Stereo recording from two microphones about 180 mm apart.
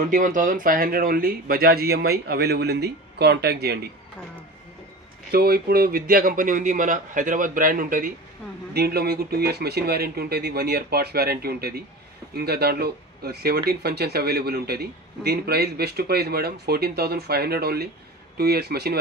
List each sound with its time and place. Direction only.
0.0 s speech: 45° right (ahead or behind); by 3.8 s 65° right (ahead or behind)
5.3 s speech: 55° right (ahead or behind)
8.7 s speech: 60° right (ahead or behind)